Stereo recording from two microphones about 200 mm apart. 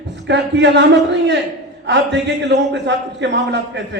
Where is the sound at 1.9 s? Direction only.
60° right (ahead or behind).